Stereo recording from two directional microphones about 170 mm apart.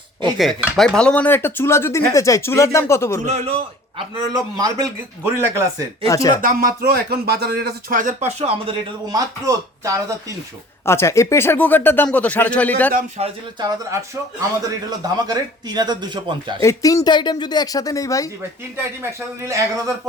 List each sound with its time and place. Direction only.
0.3 s cutlery: centre (ahead or behind); by 3.2 s 15° left (ahead or behind)
3.2 s a man's voice: 40° right (ahead or behind); by 5.6 s 20° right (ahead or behind)
6.1 s speech: 20° left (ahead or behind)
6.3 s speech: 55° right (ahead or behind); by 8.7 s 35° right (ahead or behind)
9.0 s a man's voice: 20° right (ahead or behind)
10.8 s cutlery: 15° left (ahead or behind)
13.2 s speech: 40° right (ahead or behind)
13.6 s a man's voice: 20° right (ahead or behind)
16.6 s speech: 20° left (ahead or behind)
19.4 s speech: 15° right (ahead or behind)